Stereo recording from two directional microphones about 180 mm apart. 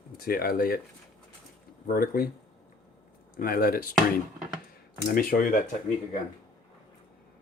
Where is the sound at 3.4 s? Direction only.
55° left (ahead or behind).